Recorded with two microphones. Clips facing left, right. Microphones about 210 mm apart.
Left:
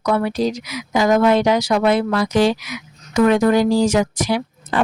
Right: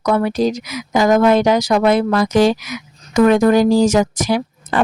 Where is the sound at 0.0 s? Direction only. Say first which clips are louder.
Right 3 dB; 45° right (ahead or behind).